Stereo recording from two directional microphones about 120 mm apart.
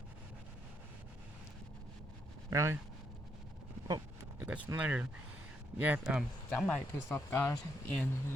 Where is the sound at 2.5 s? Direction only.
25° right (ahead or behind).